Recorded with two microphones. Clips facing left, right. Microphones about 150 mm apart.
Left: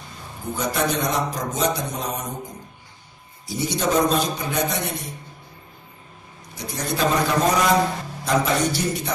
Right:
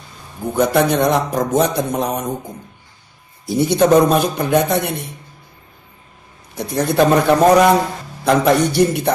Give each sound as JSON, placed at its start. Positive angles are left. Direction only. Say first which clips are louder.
{"t": 0.4, "sound": "a man's voice", "louder": "right 9 dB", "side_deg": -60}
{"t": 3.4, "sound": "a man's voice", "louder": "right 10 dB", "side_deg": -55}
{"t": 6.5, "sound": "a man's voice", "louder": "right 10 dB", "side_deg": -60}